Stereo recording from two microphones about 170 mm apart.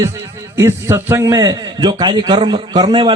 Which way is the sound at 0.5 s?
15° right (ahead or behind).